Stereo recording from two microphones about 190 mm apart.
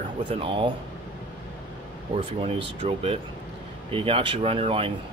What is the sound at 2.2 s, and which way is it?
Speech, 30° right (ahead or behind).